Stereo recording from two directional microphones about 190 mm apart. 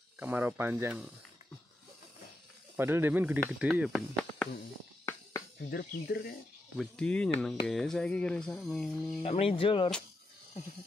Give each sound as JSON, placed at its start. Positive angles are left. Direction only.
{"t": 0.2, "sound": "speech", "side_deg": -10}
{"t": 2.7, "sound": "speech", "side_deg": -10}
{"t": 5.7, "sound": "speech", "side_deg": 55}
{"t": 6.8, "sound": "speech", "side_deg": 5}
{"t": 9.2, "sound": "speech", "side_deg": 30}